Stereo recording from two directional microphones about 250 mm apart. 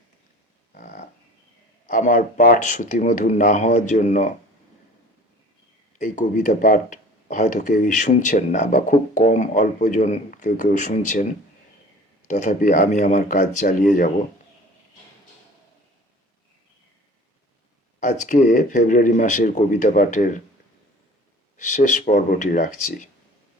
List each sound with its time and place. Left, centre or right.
0.7 s livestock: left
1.9 s speech: left
6.0 s speech: left
12.3 s speech: left
18.0 s speech: left
21.6 s speech: left